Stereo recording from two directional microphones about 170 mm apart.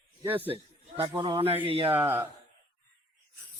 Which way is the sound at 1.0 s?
30° right (ahead or behind).